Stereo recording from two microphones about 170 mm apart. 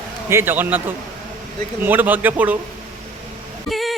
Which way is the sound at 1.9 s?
10° right (ahead or behind).